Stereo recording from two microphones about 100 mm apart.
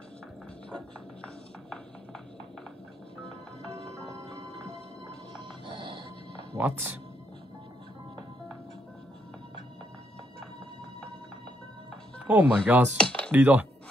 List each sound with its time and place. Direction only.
0.7 s music: 10° left (ahead or behind)
4.1 s music: 35° right (ahead or behind)
5.4 s music: 55° right (ahead or behind)
6.5 s speech: 20° right (ahead or behind)
12.3 s speech: 15° right (ahead or behind)
12.9 s dishes: 10° left (ahead or behind)
13.3 s speech: 15° right (ahead or behind)